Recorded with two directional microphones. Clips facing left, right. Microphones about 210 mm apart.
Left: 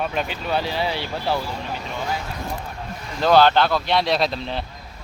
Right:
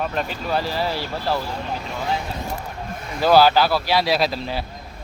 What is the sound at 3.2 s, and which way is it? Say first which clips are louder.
A man's voice: right 1 dB; 5° right (ahead or behind).